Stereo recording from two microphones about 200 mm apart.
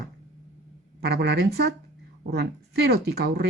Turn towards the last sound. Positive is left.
turn(degrees=-55)  # may be behind; listen again after turning